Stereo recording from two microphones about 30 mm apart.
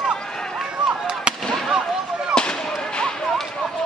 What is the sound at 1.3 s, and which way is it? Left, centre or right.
Fireworks, right.